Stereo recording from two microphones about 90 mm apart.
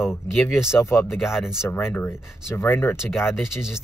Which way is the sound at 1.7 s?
25° left (ahead or behind).